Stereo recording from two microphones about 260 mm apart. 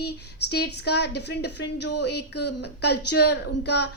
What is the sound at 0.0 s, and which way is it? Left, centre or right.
Speech, left.